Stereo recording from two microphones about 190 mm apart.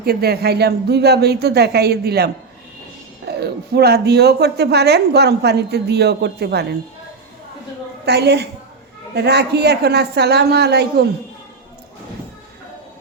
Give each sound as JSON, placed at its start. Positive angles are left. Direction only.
{"t": 0.0, "sound": "speech", "side_deg": -55}
{"t": 8.0, "sound": "speech", "side_deg": -60}